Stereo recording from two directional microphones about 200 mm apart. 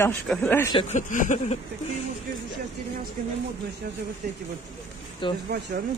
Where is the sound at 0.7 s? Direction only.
35° left (ahead or behind).